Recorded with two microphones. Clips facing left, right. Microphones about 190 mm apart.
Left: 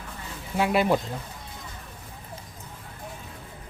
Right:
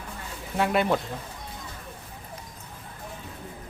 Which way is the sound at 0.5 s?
5° left (ahead or behind).